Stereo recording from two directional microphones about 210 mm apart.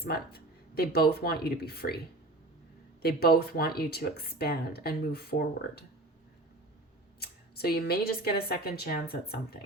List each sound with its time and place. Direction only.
0.0 s speech: 45° left (ahead or behind)
3.0 s speech: 45° left (ahead or behind)
7.2 s speech: 50° left (ahead or behind)